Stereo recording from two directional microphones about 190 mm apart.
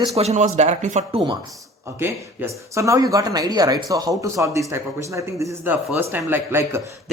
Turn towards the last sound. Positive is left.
turn(degrees=-15)  # may be behind; listen again after turning